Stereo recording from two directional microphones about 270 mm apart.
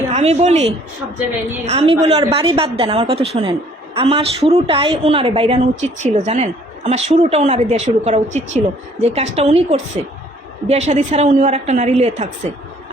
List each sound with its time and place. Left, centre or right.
0.1 s a woman's voice: right